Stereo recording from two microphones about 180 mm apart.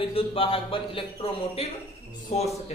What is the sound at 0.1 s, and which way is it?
A man's voice, 30° left (ahead or behind).